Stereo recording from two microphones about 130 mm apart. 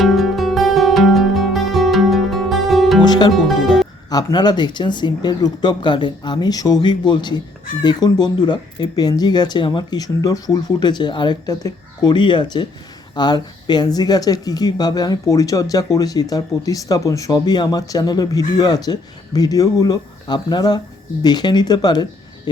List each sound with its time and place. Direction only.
0.0 s music: centre (ahead or behind)
3.0 s music: 35° left (ahead or behind)
3.3 s speech: centre (ahead or behind)
4.1 s speech: 30° left (ahead or behind)